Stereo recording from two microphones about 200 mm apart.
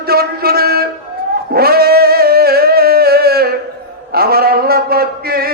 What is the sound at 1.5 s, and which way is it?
Music, 50° right (ahead or behind).